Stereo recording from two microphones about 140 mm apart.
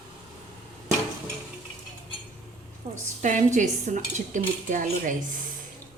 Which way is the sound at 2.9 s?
60° right (ahead or behind).